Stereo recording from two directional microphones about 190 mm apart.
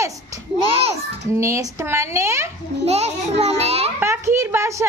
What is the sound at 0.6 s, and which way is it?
Children playing, 30° right (ahead or behind).